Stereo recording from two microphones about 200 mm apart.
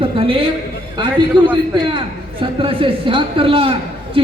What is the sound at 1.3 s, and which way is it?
A man's voice, 25° right (ahead or behind).